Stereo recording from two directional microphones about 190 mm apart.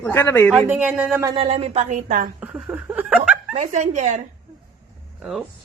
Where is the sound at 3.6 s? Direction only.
40° right (ahead or behind).